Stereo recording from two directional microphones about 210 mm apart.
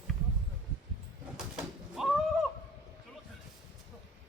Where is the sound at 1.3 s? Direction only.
Centre (ahead or behind).